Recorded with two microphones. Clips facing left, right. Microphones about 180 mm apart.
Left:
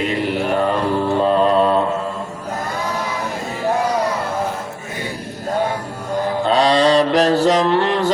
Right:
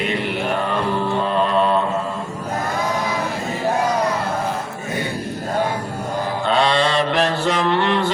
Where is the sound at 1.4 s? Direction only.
40° left (ahead or behind).